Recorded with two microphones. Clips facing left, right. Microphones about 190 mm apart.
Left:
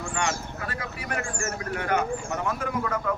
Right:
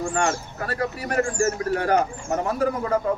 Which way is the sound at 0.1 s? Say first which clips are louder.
Right 5 dB; 40° right (ahead or behind).